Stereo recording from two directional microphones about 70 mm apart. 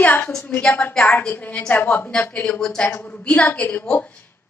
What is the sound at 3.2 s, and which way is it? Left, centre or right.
Speech, centre.